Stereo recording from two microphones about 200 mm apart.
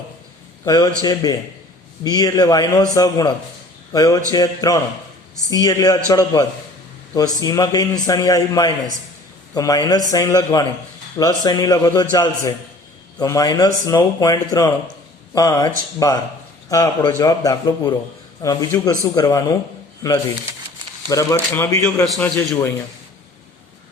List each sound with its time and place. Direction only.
0.6 s a man's voice: 20° left (ahead or behind)
13.1 s a man's voice: 20° left (ahead or behind)